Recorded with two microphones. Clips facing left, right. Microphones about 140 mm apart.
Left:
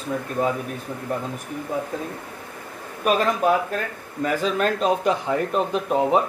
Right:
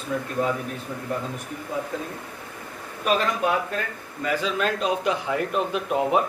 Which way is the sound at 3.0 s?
45° left (ahead or behind).